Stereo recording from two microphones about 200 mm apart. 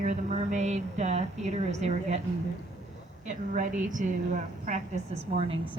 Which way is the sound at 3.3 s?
40° right (ahead or behind).